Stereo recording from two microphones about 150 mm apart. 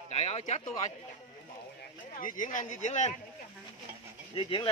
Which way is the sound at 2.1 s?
65° left (ahead or behind).